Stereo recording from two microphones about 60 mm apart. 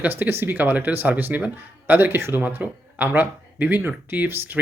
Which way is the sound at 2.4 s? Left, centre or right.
Right.